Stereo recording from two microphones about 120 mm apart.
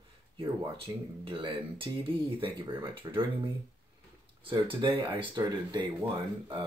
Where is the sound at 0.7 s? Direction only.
45° right (ahead or behind).